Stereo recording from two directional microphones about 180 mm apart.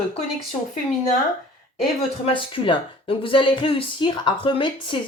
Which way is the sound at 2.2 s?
30° left (ahead or behind).